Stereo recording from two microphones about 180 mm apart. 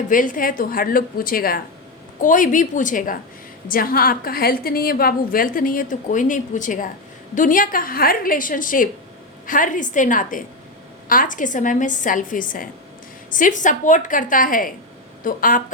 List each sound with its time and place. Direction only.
0.1 s a woman's voice: 50° left (ahead or behind)